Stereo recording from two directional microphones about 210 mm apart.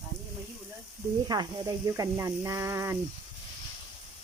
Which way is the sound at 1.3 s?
20° right (ahead or behind).